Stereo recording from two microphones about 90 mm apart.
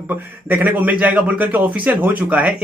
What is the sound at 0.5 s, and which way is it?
Speech, 15° right (ahead or behind).